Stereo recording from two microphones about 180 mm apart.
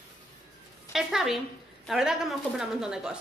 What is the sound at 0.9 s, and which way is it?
A woman's voice, centre (ahead or behind).